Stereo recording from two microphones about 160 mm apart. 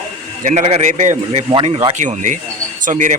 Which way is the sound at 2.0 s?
50° right (ahead or behind).